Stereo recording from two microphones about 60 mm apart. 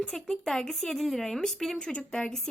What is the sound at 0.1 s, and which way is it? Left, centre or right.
Speech, centre.